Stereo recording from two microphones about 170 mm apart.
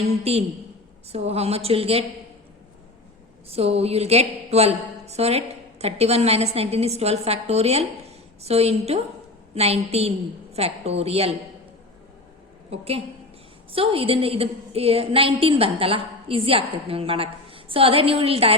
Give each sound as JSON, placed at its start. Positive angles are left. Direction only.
{"t": 1.1, "sound": "a woman's voice", "side_deg": -35}
{"t": 3.5, "sound": "a woman's voice", "side_deg": -35}
{"t": 12.7, "sound": "a woman's voice", "side_deg": -35}